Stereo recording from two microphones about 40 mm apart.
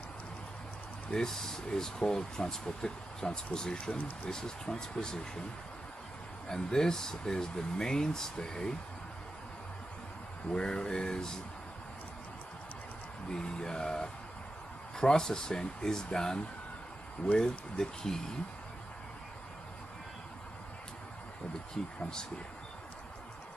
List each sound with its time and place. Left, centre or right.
1.1 s speech: centre
6.5 s speech: centre
10.5 s speech: centre
13.3 s speech: left
17.4 s speech: centre
21.8 s speech: centre